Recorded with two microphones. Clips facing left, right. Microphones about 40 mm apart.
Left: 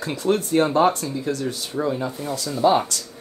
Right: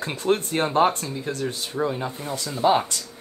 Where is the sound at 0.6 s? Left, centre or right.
Right.